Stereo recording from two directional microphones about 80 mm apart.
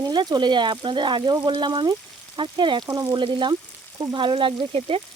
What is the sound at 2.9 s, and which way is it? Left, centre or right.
Speech, right.